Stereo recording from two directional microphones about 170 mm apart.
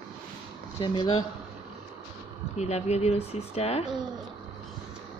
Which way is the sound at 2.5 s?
40° left (ahead or behind).